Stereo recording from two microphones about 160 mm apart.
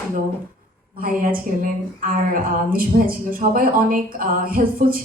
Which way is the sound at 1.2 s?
60° right (ahead or behind).